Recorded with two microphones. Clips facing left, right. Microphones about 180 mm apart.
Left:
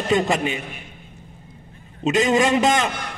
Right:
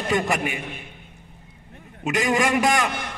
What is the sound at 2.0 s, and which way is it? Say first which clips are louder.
Speech: left 4 dB; 20° left (ahead or behind).